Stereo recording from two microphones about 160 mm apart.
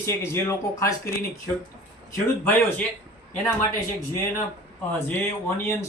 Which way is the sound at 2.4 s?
10° left (ahead or behind).